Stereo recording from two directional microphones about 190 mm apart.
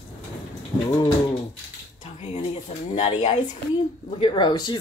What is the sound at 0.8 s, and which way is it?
Speech, 20° left (ahead or behind).